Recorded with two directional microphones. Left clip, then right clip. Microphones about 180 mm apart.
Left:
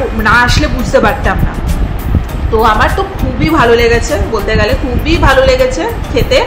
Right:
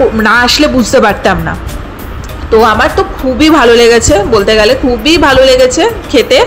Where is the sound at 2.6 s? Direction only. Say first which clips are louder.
Right 3 dB; 35° right (ahead or behind).